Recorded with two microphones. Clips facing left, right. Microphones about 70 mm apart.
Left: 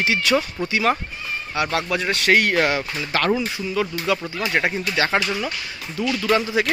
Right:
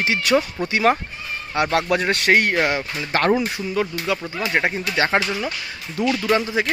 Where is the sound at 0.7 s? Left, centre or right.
Right.